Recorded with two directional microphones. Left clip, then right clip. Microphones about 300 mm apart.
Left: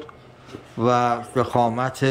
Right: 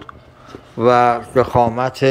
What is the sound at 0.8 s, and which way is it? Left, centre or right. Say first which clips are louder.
A man's voice: right 7 dB; centre.